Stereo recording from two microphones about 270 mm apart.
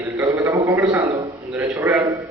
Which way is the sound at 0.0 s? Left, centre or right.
Centre.